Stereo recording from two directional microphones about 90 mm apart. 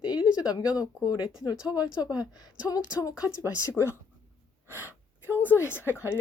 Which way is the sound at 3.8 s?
10° left (ahead or behind).